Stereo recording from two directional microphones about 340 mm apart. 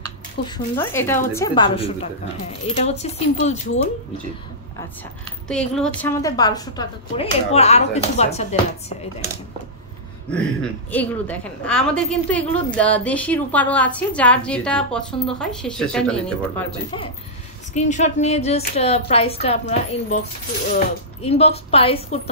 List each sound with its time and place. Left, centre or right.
0.5 s a woman's voice: centre
5.5 s a woman's voice: centre
10.3 s a woman's voice: centre
17.7 s a woman's voice: left